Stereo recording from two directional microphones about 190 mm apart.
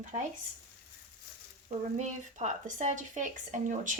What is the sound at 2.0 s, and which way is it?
Speech, 40° right (ahead or behind).